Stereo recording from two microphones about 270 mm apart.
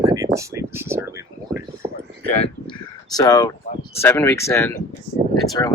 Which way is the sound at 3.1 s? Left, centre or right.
Centre.